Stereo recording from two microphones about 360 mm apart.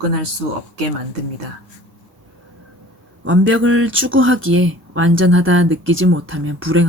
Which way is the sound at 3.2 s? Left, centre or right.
Right.